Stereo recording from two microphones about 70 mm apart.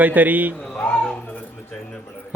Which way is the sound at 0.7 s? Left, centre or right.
Centre.